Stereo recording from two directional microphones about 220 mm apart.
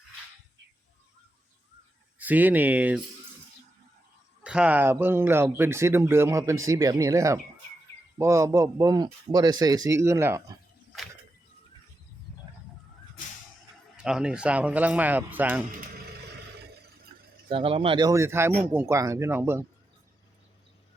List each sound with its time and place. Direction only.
2.1 s speech: 10° right (ahead or behind)
4.4 s speech: 5° right (ahead or behind)
13.9 s speech: 5° right (ahead or behind)
17.5 s speech: 25° right (ahead or behind)